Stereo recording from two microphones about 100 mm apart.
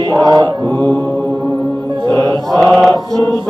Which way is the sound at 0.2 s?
45° right (ahead or behind).